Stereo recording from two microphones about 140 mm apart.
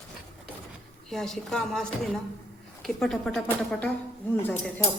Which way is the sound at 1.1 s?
5° left (ahead or behind).